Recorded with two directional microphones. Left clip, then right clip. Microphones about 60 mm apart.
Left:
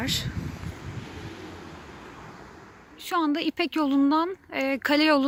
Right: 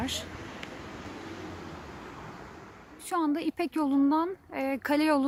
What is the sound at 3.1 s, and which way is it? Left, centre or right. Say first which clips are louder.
Speech: left 4 dB; left.